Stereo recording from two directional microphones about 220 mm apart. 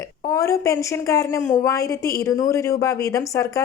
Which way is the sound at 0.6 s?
15° left (ahead or behind).